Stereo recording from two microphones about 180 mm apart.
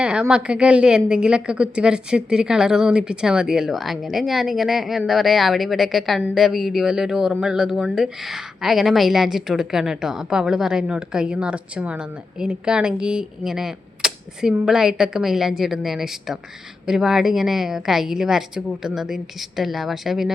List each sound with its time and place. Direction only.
0.0 s a woman's voice: 5° right (ahead or behind)